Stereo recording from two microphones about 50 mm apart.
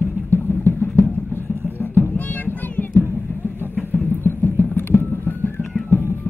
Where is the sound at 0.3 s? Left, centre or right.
Left.